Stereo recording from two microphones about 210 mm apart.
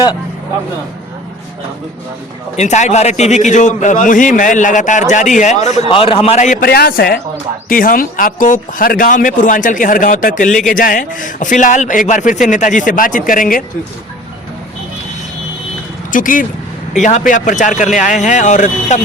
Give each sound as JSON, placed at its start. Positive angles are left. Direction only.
{"t": 2.6, "sound": "a man's voice", "side_deg": 35}
{"t": 16.1, "sound": "a man's voice", "side_deg": 40}